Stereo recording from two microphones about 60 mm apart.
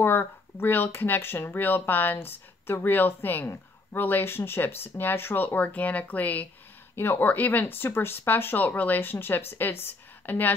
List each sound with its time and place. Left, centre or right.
0.0 s speech: left